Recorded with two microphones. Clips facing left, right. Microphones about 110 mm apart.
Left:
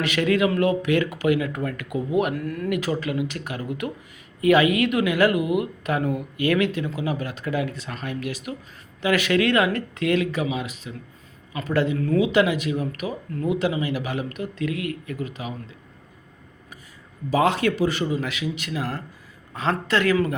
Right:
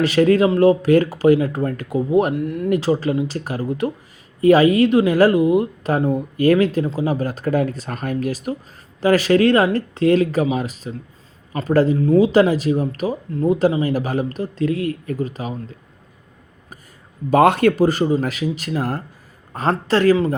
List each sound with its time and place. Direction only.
0.0 s speech: 35° right (ahead or behind)
2.3 s speech: 20° right (ahead or behind)
2.6 s speech: 35° right (ahead or behind)
11.9 s speech: 25° right (ahead or behind)
12.2 s speech: 35° right (ahead or behind)
17.3 s speech: 55° right (ahead or behind); by 20.3 s 30° right (ahead or behind)